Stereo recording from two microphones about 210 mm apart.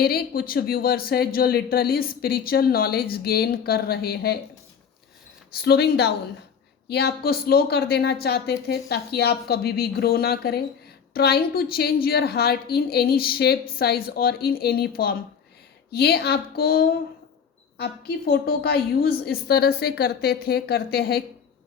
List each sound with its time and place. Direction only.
0.0 s a man's voice: 45° left (ahead or behind)
5.5 s a man's voice: 50° left (ahead or behind)